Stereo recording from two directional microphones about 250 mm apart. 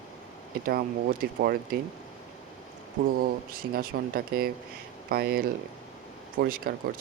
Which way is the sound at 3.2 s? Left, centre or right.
Right.